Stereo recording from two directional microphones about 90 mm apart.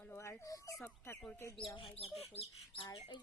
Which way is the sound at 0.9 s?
25° left (ahead or behind).